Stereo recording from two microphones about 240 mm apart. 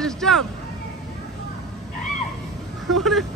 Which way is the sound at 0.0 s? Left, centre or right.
Centre.